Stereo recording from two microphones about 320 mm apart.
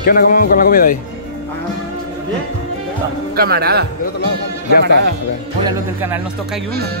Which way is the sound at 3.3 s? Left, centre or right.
Right.